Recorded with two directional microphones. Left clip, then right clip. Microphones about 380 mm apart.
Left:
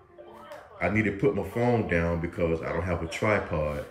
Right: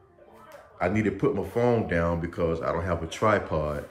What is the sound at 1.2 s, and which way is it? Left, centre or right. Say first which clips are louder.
Speech: right 3 dB; right.